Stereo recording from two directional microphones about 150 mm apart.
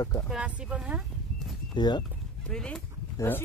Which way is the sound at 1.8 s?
30° left (ahead or behind).